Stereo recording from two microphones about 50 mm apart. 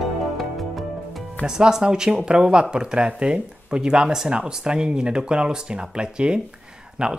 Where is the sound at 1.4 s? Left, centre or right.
Centre.